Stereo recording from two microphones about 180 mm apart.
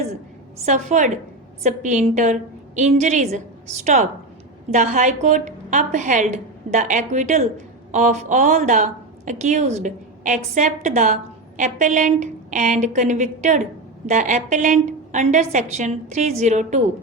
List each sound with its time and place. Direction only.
0.6 s a woman's voice: 40° right (ahead or behind)